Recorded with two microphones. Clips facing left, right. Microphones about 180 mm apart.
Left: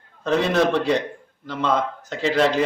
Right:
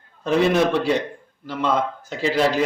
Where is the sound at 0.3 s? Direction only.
10° right (ahead or behind).